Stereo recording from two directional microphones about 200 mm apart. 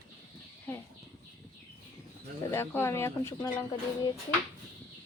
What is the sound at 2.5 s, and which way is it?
Speech, 10° left (ahead or behind).